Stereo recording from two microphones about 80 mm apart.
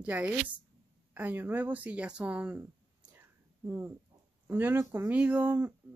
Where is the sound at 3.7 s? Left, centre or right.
Right.